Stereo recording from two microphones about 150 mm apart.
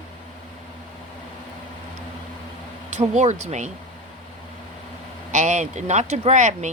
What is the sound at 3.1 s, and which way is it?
Speech, 50° right (ahead or behind).